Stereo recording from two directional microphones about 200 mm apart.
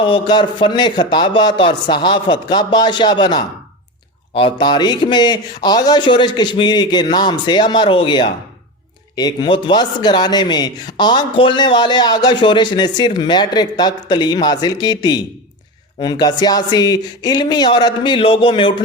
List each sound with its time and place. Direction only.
0.0 s a man's voice: 25° left (ahead or behind)